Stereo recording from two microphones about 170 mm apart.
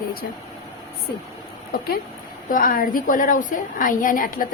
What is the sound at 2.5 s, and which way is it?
A woman's voice, 55° left (ahead or behind).